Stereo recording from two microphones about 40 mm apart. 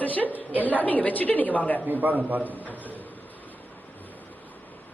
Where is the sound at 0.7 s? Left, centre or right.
Left.